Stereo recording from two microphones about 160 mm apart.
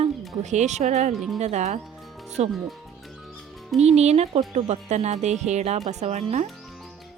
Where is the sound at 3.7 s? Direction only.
40° right (ahead or behind).